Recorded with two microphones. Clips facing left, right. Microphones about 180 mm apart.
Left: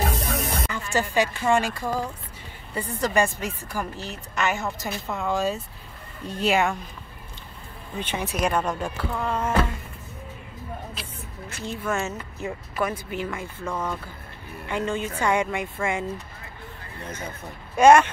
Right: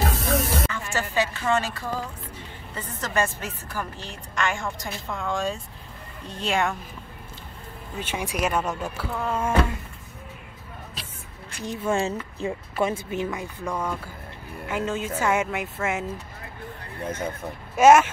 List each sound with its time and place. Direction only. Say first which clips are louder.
0.0 s music: right 2 dB; centre (ahead or behind)
0.7 s a woman's voice: left 3 dB; 15° left (ahead or behind)
8.0 s speech: left 1 dB; 10° right (ahead or behind)
11.6 s speech: right 3 dB; 15° right (ahead or behind)
17.7 s speech: even; 5° right (ahead or behind)